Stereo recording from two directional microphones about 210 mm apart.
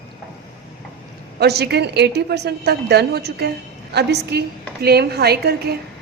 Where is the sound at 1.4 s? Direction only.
50° right (ahead or behind).